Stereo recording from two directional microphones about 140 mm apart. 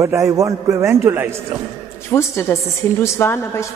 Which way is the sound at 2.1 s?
20° left (ahead or behind).